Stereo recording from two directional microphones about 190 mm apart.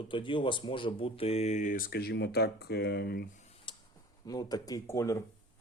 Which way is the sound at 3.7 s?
25° left (ahead or behind).